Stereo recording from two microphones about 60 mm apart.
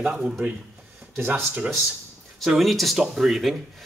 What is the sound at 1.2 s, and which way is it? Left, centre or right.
Speech, right.